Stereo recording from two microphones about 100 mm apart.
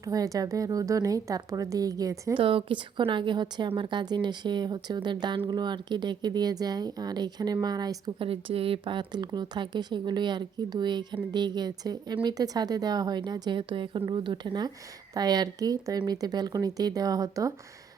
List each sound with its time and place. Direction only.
0.0 s speech: 35° right (ahead or behind)
2.3 s a woman's voice: 65° right (ahead or behind); by 8.1 s 40° right (ahead or behind)
8.2 s speech: 65° right (ahead or behind); by 17.5 s 35° right (ahead or behind)